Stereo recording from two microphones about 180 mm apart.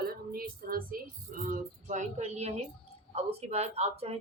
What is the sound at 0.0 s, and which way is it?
Music, 55° right (ahead or behind).